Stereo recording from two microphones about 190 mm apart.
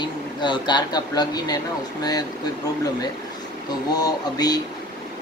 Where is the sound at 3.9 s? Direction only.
20° left (ahead or behind).